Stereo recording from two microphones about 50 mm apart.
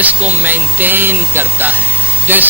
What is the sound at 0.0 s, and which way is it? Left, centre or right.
Speech, right.